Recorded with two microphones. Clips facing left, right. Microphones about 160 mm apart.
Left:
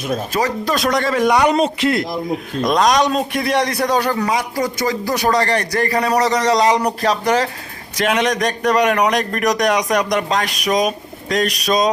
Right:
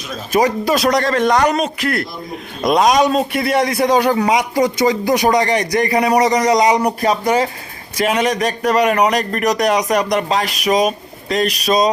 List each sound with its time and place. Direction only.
0.3 s a man's voice: 20° right (ahead or behind)
0.7 s a man's voice: centre (ahead or behind)
1.5 s speech: 25° left (ahead or behind)
2.6 s a man's voice: 5° right (ahead or behind)